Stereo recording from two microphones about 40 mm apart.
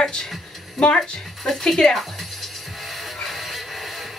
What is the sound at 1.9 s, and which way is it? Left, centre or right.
Music, centre.